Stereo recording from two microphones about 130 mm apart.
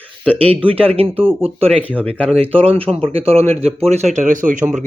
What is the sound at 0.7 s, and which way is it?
Speech, 45° right (ahead or behind).